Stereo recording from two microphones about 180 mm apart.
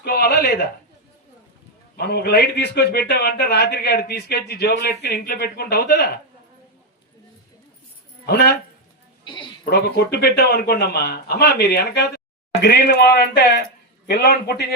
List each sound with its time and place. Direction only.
0.0 s a man's voice: 60° left (ahead or behind)
2.0 s a man's voice: 60° left (ahead or behind)
8.3 s a man's voice: 65° left (ahead or behind)
9.2 s a sound: 25° left (ahead or behind)
9.6 s a man's voice: 60° left (ahead or behind)